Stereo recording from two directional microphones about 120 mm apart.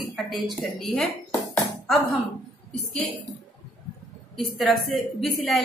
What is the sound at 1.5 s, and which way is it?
Music, centre (ahead or behind).